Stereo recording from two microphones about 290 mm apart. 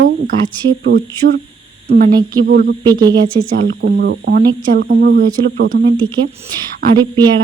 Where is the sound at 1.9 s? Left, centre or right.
Right.